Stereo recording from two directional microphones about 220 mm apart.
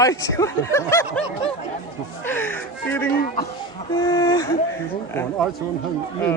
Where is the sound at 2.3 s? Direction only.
10° left (ahead or behind).